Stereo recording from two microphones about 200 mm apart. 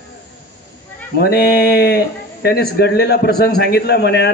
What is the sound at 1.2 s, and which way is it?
A man's voice, 50° left (ahead or behind).